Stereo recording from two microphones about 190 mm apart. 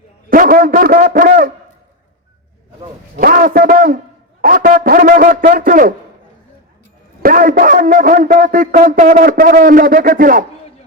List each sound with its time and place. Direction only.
0.3 s a man's voice: 50° right (ahead or behind)
3.2 s a man's voice: 50° right (ahead or behind)
7.2 s a man's voice: 50° right (ahead or behind)